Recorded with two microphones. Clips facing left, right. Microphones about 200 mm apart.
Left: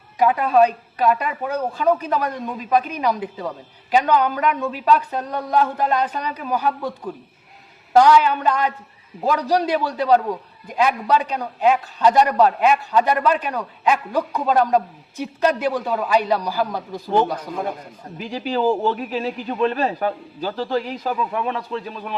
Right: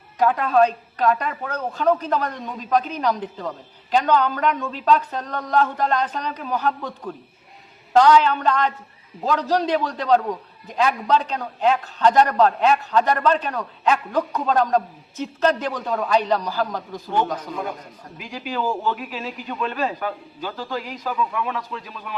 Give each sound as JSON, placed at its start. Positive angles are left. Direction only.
{"t": 0.2, "sound": "a man's voice", "side_deg": 10}
{"t": 18.2, "sound": "speech", "side_deg": 35}